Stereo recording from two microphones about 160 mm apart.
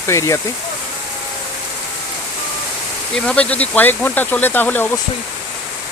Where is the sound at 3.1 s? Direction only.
5° left (ahead or behind).